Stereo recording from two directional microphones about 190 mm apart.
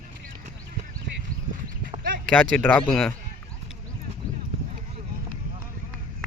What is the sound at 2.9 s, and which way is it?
Speech, 5° left (ahead or behind).